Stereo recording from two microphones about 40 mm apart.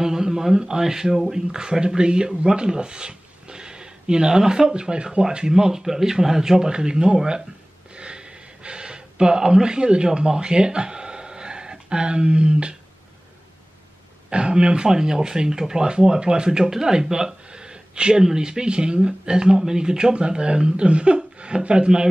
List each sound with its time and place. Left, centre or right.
0.0 s speech: centre
7.9 s gasp: right
14.3 s speech: right
14.9 s speech: centre